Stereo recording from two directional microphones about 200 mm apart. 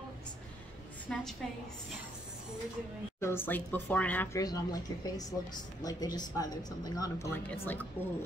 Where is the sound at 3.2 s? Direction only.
10° left (ahead or behind).